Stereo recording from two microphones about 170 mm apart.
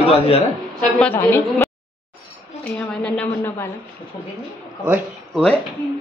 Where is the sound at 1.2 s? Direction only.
15° left (ahead or behind).